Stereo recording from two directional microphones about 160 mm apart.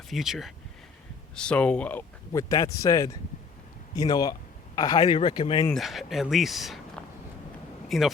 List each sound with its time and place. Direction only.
0.1 s speech: centre (ahead or behind); by 5.6 s 30° left (ahead or behind)
5.7 s speech: centre (ahead or behind)